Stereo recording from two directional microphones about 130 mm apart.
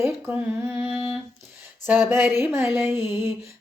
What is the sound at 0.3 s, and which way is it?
Mantra, 15° right (ahead or behind).